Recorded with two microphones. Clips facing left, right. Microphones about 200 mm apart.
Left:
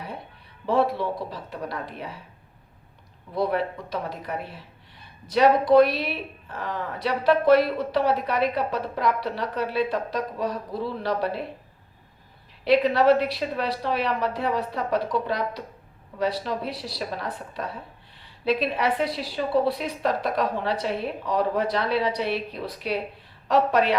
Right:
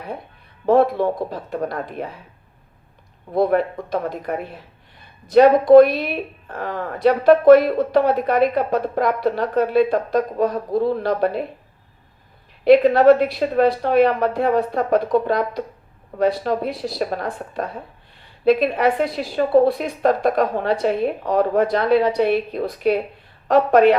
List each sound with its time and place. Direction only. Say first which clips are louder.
0.6 s a woman's voice: right 7 dB; 50° right (ahead or behind)
3.3 s a woman's voice: right 7 dB; 50° right (ahead or behind)
12.6 s a woman's voice: right 7 dB; 50° right (ahead or behind)